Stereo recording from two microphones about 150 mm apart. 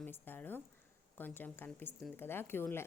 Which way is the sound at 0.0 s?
10° left (ahead or behind).